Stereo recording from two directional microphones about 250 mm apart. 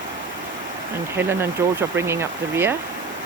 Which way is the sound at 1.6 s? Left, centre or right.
Centre.